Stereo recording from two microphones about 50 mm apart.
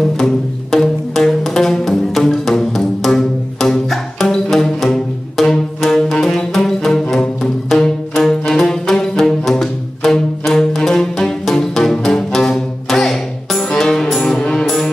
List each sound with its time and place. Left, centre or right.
0.2 s music: centre